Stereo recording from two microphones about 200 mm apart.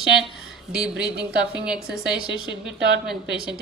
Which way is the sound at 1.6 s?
5° right (ahead or behind).